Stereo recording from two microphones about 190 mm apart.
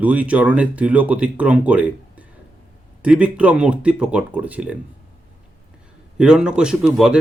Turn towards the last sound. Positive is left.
turn(degrees=-5)  # may be behind; listen again after turning